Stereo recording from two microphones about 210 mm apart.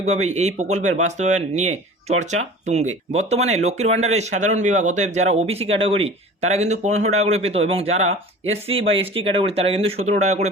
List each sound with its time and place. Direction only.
0.0 s speech: 35° right (ahead or behind)